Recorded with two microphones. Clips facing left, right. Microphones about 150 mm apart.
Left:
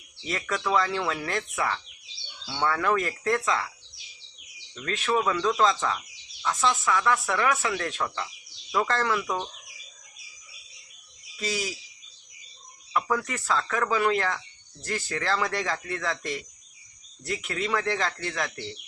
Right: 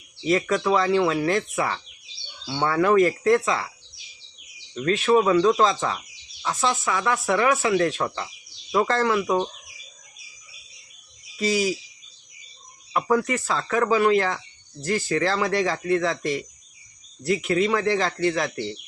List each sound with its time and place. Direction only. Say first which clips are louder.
0.3 s speech: right 7 dB; 10° right (ahead or behind)
4.7 s speech: right 8 dB; 10° right (ahead or behind)
6.5 s speech: right 1 dB; 35° right (ahead or behind)
6.8 s speech: right 1 dB; 15° right (ahead or behind)
9.1 s speech: right 7 dB; 25° right (ahead or behind)
11.3 s speech: right 8 dB; 10° right (ahead or behind)
13.1 s speech: right 8 dB; 10° right (ahead or behind)